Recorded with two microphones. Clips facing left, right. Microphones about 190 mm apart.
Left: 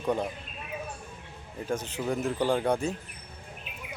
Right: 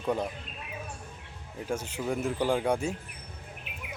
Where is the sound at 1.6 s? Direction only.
10° right (ahead or behind).